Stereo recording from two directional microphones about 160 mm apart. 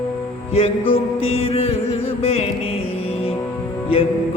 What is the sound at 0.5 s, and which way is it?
Music, 40° left (ahead or behind).